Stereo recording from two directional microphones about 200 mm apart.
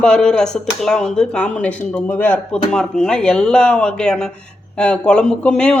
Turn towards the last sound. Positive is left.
turn(degrees=5)  # may be behind; listen again after turning